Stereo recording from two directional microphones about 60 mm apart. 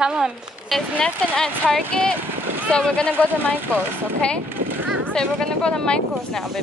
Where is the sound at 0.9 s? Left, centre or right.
Centre.